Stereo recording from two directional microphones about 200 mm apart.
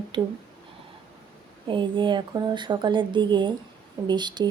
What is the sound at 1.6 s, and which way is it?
Speech, 25° right (ahead or behind).